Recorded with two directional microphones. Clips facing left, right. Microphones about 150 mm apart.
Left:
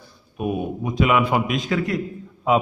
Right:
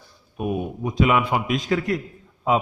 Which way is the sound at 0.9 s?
30° right (ahead or behind).